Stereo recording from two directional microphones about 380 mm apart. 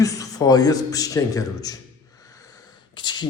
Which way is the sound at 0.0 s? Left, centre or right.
Centre.